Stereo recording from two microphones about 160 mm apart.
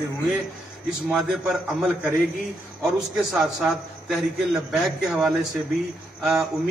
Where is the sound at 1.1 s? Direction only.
Centre (ahead or behind).